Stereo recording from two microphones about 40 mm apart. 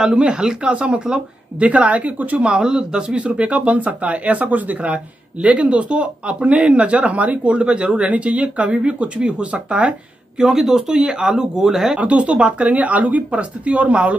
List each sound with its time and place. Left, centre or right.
0.0 s speech: right
1.6 s speech: right
2.4 s speech: centre
10.4 s speech: centre
12.0 s speech: right
12.6 s speech: right